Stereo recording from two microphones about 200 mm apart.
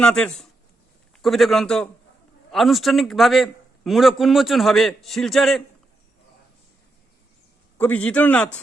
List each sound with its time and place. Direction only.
0.0 s a man's voice: 5° left (ahead or behind)
7.8 s a man's voice: 5° left (ahead or behind)